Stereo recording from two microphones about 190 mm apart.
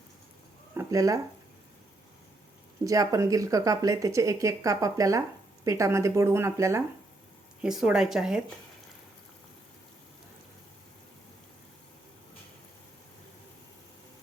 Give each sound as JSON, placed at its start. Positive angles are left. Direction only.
{"t": 0.7, "sound": "a sound", "side_deg": -15}
{"t": 2.8, "sound": "speech", "side_deg": -20}
{"t": 7.6, "sound": "speech", "side_deg": -5}